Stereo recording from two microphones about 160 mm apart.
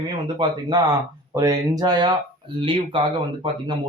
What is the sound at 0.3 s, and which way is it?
Speech, 25° right (ahead or behind).